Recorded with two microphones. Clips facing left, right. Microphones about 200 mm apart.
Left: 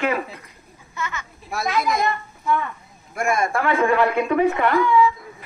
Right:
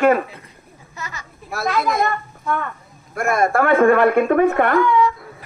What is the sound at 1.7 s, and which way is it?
A woman's voice, 50° right (ahead or behind).